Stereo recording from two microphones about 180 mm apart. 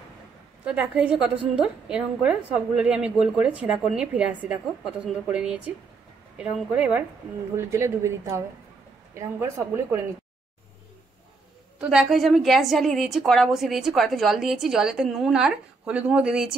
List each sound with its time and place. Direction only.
0.7 s a woman's voice: 5° right (ahead or behind)
11.8 s a woman's voice: 5° right (ahead or behind)